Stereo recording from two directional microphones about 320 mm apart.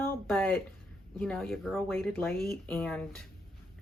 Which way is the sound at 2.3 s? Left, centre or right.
Left.